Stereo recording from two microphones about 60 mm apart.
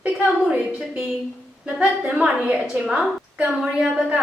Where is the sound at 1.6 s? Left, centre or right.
Centre.